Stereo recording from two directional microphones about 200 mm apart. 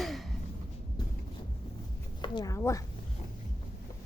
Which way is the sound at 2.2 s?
20° left (ahead or behind).